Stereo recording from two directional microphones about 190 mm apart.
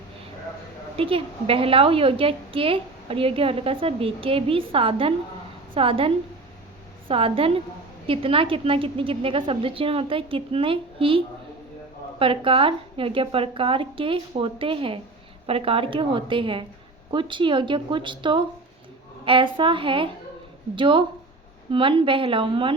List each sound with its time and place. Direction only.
0.9 s a woman's voice: 30° right (ahead or behind)
12.2 s a woman's voice: 25° right (ahead or behind)